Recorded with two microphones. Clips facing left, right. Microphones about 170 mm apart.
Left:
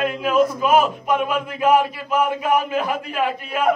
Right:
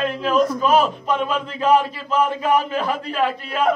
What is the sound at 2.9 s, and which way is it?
Speech, 50° left (ahead or behind).